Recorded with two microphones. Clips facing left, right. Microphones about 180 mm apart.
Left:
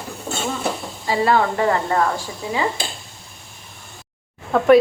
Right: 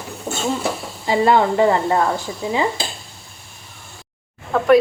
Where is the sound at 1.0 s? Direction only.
20° right (ahead or behind).